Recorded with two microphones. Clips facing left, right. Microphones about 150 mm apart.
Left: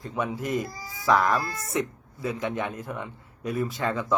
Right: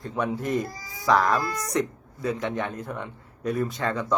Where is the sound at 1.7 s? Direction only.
25° left (ahead or behind).